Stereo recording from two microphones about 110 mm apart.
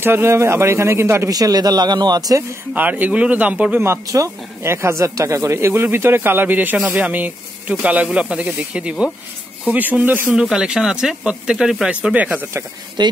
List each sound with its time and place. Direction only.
0.0 s speech: 20° right (ahead or behind)
2.7 s speech: 15° right (ahead or behind)
13.0 s speech: 40° right (ahead or behind)